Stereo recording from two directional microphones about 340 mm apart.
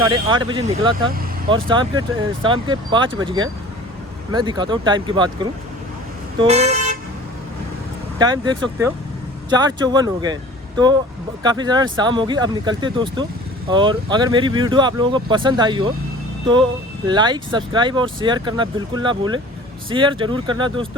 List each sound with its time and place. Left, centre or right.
0.0 s speech: centre
6.4 s vehicle: centre
8.2 s speech: centre
11.4 s speech: centre
17.1 s speech: centre